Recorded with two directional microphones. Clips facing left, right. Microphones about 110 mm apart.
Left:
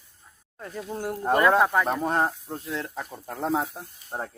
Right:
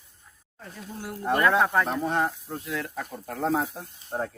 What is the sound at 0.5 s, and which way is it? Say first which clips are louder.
Speech: left 6 dB; 55° left (ahead or behind).